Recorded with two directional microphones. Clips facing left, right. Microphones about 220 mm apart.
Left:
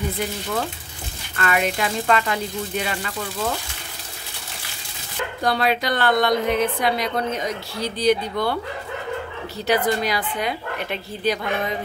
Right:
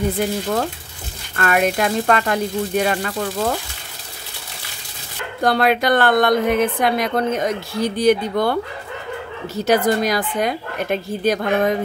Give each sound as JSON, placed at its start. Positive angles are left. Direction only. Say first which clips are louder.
{"t": 1.3, "sound": "a woman's voice", "louder": "right 4 dB", "side_deg": -50}
{"t": 5.4, "sound": "a woman's voice", "louder": "right 5 dB", "side_deg": -55}
{"t": 9.7, "sound": "a woman's voice", "louder": "right 4 dB", "side_deg": -45}